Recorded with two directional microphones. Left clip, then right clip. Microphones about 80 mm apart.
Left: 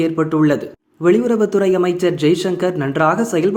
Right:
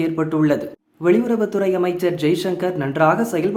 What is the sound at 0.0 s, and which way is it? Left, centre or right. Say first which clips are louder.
Speech: left 3 dB; left.